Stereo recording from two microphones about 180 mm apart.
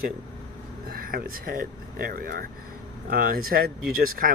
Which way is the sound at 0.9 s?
55° right (ahead or behind).